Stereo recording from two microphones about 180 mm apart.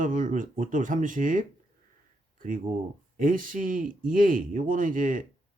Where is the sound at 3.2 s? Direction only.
50° right (ahead or behind).